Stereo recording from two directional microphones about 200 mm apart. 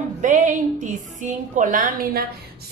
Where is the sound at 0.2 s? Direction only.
40° right (ahead or behind).